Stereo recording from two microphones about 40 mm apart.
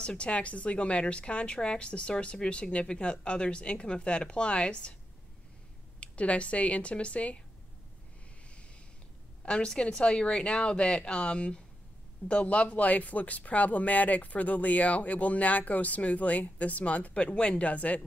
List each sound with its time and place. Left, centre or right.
0.0 s a woman's voice: left
5.9 s speech: left
9.4 s a woman's voice: left